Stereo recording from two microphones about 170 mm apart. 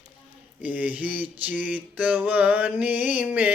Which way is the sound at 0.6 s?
10° right (ahead or behind).